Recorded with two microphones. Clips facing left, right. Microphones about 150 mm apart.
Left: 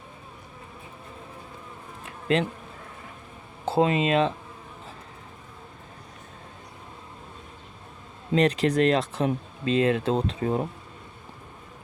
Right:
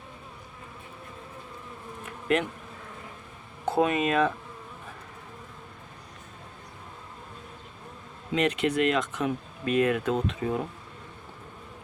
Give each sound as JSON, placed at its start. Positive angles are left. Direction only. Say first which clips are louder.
{"t": 2.0, "sound": "bee", "louder": "left 2 dB", "side_deg": 30}
{"t": 3.7, "sound": "speech", "louder": "left 2 dB", "side_deg": 25}
{"t": 8.3, "sound": "speech", "louder": "left 4 dB", "side_deg": 35}